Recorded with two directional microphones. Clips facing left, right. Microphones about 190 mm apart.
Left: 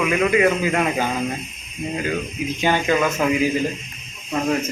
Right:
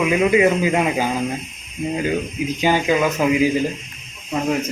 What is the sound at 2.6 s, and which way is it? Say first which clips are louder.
Speech: right 2 dB; 10° right (ahead or behind).